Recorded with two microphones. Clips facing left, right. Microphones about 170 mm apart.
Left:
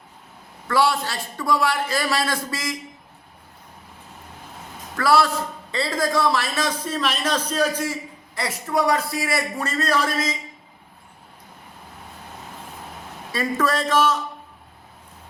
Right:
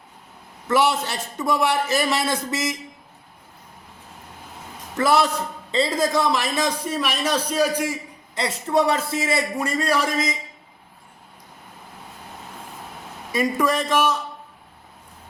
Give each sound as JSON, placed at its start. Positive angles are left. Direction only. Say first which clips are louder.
{"t": 0.7, "sound": "a man's voice", "louder": "right 1 dB", "side_deg": -20}
{"t": 4.9, "sound": "a man's voice", "louder": "even", "side_deg": -20}
{"t": 8.4, "sound": "a man's voice", "louder": "right 3 dB", "side_deg": -25}
{"t": 9.6, "sound": "a man's voice", "louder": "left 1 dB", "side_deg": -10}
{"t": 13.3, "sound": "a man's voice", "louder": "right 2 dB", "side_deg": -15}